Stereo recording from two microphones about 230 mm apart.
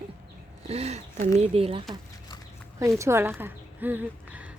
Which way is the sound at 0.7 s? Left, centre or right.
Right.